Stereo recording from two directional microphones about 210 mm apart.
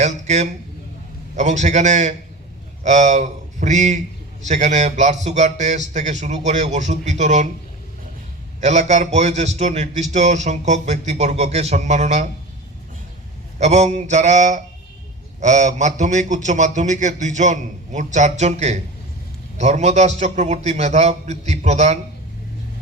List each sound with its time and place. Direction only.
0.0 s a man's voice: 35° right (ahead or behind)
8.6 s a man's voice: 35° right (ahead or behind)
13.6 s a man's voice: 35° right (ahead or behind)